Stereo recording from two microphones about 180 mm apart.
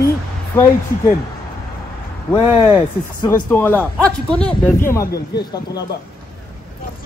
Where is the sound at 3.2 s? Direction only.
10° left (ahead or behind).